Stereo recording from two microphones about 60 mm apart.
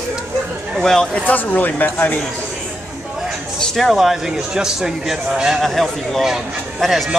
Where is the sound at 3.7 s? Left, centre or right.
Centre.